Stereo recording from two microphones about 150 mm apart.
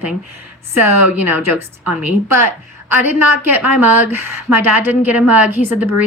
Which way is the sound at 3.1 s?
15° right (ahead or behind).